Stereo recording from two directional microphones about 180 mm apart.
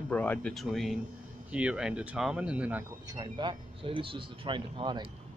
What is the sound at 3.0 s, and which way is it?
Speech, 20° right (ahead or behind).